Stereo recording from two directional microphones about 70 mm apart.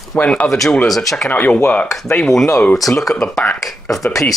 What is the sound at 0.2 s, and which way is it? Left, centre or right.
Speech, centre.